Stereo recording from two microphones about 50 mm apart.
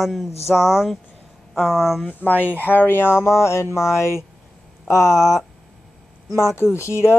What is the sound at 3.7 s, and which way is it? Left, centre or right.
Speech, left.